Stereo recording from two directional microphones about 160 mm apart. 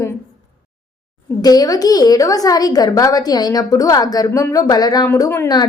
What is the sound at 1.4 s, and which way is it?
A woman's voice, 25° left (ahead or behind).